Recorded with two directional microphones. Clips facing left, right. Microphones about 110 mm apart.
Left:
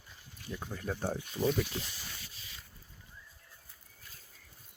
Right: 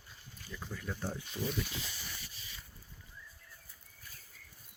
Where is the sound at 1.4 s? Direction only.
15° left (ahead or behind).